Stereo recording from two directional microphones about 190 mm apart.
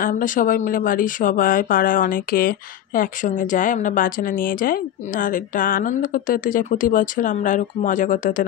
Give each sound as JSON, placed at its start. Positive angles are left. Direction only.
{"t": 0.0, "sound": "speech", "side_deg": 45}